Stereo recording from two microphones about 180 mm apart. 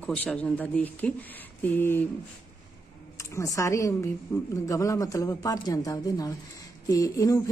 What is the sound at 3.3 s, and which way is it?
A woman's voice, 15° left (ahead or behind).